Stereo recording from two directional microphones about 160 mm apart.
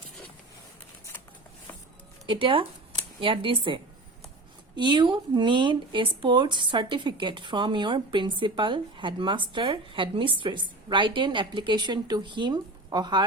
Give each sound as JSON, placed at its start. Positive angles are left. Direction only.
{"t": 2.2, "sound": "speech", "side_deg": -30}